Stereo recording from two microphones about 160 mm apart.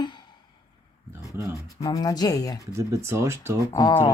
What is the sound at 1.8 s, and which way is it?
Speech, 20° left (ahead or behind).